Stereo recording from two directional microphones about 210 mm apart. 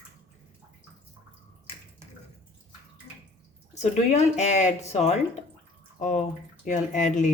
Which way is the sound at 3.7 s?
30° left (ahead or behind).